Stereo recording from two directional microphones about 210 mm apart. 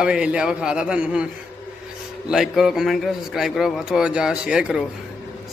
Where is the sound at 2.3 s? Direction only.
Centre (ahead or behind).